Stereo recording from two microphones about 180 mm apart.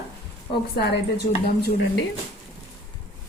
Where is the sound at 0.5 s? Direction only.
60° left (ahead or behind).